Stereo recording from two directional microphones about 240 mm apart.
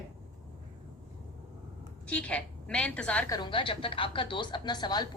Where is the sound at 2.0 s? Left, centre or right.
Centre.